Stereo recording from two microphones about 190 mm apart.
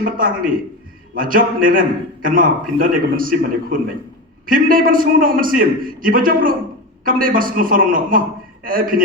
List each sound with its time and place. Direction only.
0.0 s a man's voice: 45° right (ahead or behind)